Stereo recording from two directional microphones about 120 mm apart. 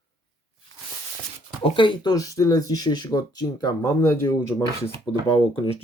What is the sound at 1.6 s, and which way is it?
Speech, 45° left (ahead or behind).